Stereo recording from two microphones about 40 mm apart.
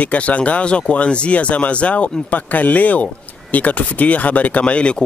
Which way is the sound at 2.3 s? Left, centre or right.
Left.